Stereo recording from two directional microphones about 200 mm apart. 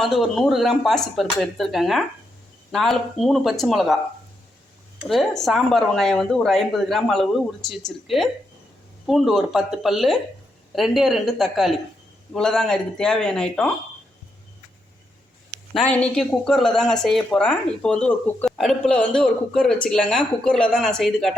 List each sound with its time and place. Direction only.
0.0 s speech: centre (ahead or behind)
4.9 s speech: centre (ahead or behind)
15.7 s speech: 5° left (ahead or behind)